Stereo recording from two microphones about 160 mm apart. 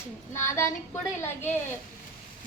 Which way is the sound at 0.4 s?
15° left (ahead or behind).